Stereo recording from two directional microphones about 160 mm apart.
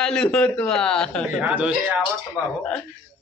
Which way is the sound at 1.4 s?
10° right (ahead or behind).